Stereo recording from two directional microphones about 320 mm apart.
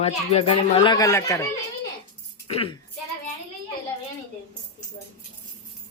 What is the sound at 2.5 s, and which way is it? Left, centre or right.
Speech, centre.